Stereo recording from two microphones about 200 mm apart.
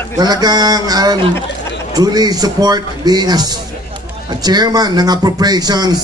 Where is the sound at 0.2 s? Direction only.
20° right (ahead or behind).